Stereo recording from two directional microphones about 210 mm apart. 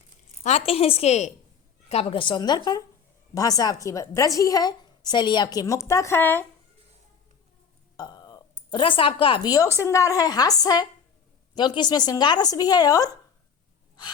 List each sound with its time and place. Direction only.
0.4 s a woman's voice: 30° left (ahead or behind); by 6.4 s 10° left (ahead or behind)
7.9 s speech: 20° left (ahead or behind)